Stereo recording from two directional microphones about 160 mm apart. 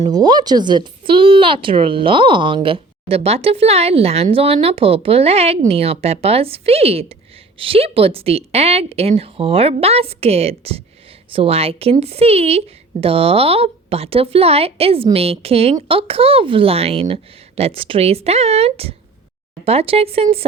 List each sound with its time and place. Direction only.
0.1 s speech: 25° right (ahead or behind)